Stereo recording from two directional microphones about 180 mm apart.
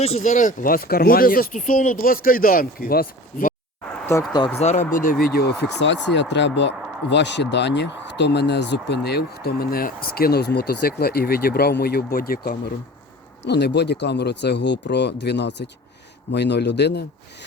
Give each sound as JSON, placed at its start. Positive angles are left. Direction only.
{"t": 0.0, "sound": "speech", "side_deg": 40}
{"t": 4.1, "sound": "speech", "side_deg": 15}
{"t": 4.5, "sound": "speech", "side_deg": 40}
{"t": 5.2, "sound": "speech", "side_deg": 60}
{"t": 13.4, "sound": "speech", "side_deg": 70}